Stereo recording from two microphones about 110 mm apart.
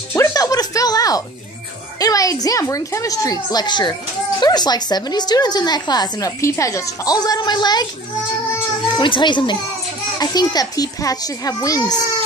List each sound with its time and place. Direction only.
0.1 s music: 30° left (ahead or behind)
2.0 s a woman's voice: 35° left (ahead or behind)
8.9 s a child's voice: 45° left (ahead or behind)